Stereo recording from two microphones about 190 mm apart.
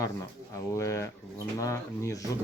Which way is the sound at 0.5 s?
15° left (ahead or behind).